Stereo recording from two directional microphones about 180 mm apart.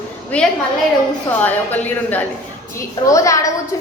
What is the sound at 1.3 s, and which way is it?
A woman's voice, 10° left (ahead or behind).